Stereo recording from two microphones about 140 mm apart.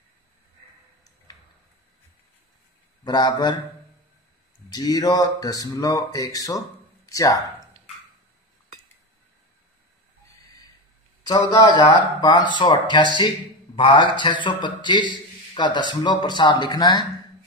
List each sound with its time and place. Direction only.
3.0 s a man's voice: 30° left (ahead or behind)
4.7 s speech: 25° left (ahead or behind)
11.2 s a man's voice: 30° left (ahead or behind)